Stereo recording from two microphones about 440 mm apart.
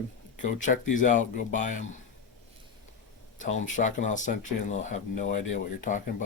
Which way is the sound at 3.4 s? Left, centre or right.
Centre.